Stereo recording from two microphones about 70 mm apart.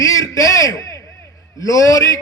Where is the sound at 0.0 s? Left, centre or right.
Left.